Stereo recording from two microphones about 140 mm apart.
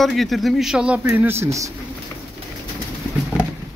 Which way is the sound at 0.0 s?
Centre (ahead or behind).